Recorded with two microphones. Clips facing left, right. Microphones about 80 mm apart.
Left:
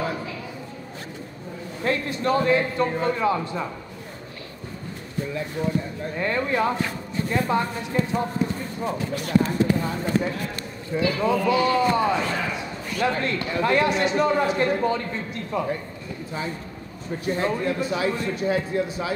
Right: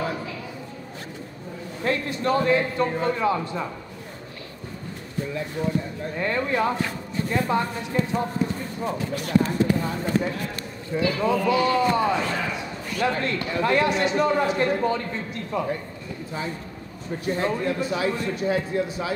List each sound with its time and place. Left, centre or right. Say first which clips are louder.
0.0 s a sound: even; centre
1.8 s speech: even; centre
5.3 s a man's voice: even; centre